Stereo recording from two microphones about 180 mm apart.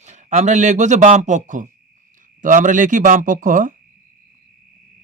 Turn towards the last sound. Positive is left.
turn(degrees=-45)  # may be behind; listen again after turning